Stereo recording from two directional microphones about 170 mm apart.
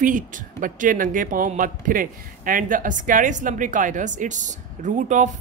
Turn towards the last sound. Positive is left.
turn(degrees=-45)  # may be behind; listen again after turning